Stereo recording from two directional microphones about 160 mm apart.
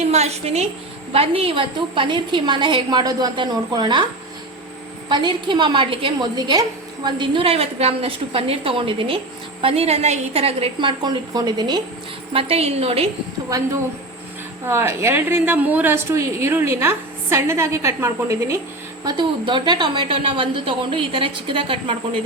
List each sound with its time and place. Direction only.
0.1 s a woman's voice: 40° right (ahead or behind)
5.0 s a woman's voice: 30° right (ahead or behind)
14.6 s a woman's voice: 15° right (ahead or behind)
19.0 s a woman's voice: 30° right (ahead or behind)